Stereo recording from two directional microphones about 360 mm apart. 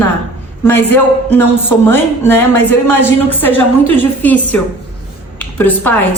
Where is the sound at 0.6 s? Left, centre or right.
Centre.